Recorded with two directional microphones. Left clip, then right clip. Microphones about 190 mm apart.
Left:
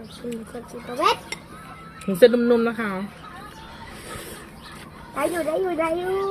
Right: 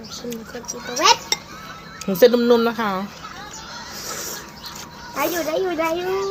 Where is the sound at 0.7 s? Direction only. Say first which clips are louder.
Right 5 dB; 10° right (ahead or behind).